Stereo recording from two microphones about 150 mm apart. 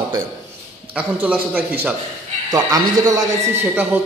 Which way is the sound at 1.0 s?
10° right (ahead or behind).